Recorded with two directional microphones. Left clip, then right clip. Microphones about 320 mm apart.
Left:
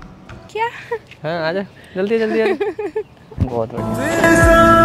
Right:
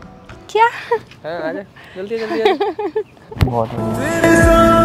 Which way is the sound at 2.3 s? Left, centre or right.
Right.